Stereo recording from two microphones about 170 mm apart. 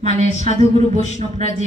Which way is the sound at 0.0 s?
40° right (ahead or behind).